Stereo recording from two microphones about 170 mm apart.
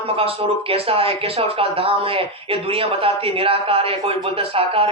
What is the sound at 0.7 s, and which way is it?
Speech, 35° right (ahead or behind).